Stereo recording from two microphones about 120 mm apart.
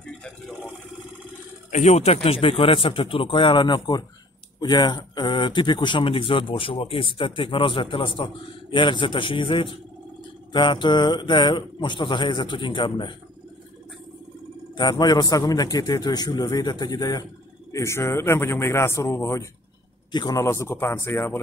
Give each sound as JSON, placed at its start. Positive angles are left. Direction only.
{"t": 1.7, "sound": "a man's voice", "side_deg": 75}
{"t": 14.8, "sound": "a man's voice", "side_deg": 35}